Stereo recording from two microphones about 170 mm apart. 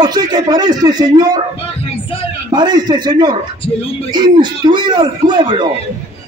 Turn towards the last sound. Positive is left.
turn(degrees=-25)  # may be behind; listen again after turning